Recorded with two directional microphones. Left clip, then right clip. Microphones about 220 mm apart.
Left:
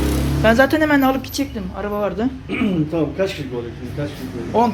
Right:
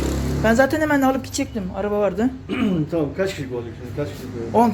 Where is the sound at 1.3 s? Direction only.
25° right (ahead or behind).